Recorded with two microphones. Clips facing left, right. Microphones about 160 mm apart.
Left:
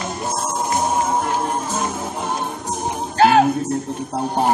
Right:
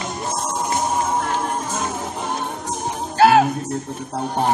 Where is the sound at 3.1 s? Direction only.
5° right (ahead or behind).